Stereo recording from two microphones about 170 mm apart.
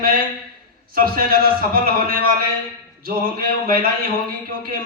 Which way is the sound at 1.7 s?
60° right (ahead or behind).